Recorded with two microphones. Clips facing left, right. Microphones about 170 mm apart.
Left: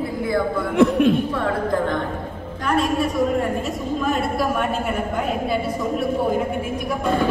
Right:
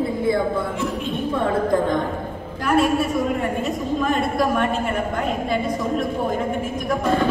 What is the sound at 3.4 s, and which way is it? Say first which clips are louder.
A woman's voice: even; centre (ahead or behind).